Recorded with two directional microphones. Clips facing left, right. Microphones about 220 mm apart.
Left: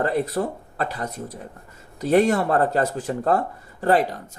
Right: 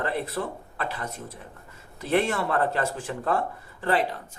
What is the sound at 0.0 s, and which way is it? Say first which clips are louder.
Speech: left 6 dB; 45° left (ahead or behind).